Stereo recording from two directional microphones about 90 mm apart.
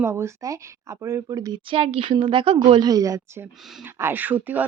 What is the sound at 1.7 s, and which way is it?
A woman's voice, 85° right.